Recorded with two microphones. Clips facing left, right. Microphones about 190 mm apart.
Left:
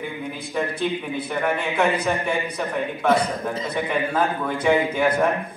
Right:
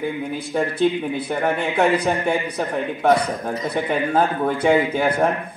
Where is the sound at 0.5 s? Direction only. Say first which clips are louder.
Right 5 dB; 30° right (ahead or behind).